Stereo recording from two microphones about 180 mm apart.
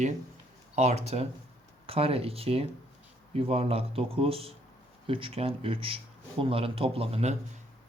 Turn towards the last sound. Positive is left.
turn(degrees=-35)  # may be behind; listen again after turning